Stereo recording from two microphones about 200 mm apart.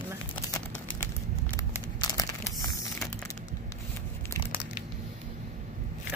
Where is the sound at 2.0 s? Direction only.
15° left (ahead or behind).